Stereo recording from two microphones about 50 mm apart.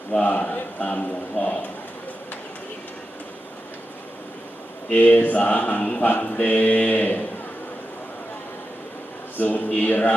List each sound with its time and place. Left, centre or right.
0.2 s a man's voice: left
4.9 s a man's voice: left
9.4 s a man's voice: left